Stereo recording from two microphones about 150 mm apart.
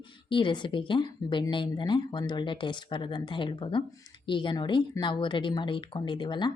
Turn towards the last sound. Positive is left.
turn(degrees=30)  # may be behind; listen again after turning